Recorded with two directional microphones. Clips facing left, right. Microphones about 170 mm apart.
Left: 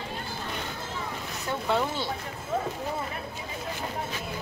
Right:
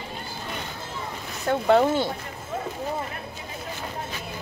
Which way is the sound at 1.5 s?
55° right (ahead or behind).